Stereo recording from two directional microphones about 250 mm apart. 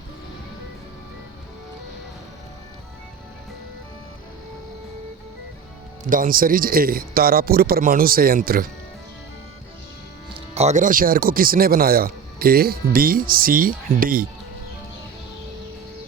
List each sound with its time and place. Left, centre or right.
6.1 s speech: right
10.3 s speech: right